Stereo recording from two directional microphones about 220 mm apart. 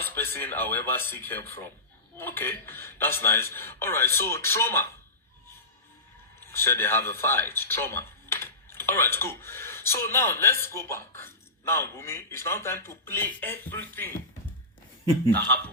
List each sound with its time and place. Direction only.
0.0 s speech: 10° left (ahead or behind)
6.4 s speech: 10° left (ahead or behind)
15.3 s speech: 45° right (ahead or behind)